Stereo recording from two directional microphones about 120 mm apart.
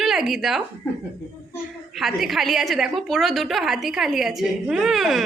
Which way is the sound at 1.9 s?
Centre (ahead or behind).